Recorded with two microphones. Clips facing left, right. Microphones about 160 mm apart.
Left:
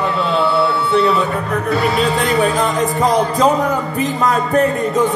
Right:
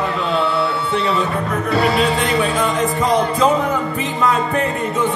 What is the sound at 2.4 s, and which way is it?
Music, 40° left (ahead or behind).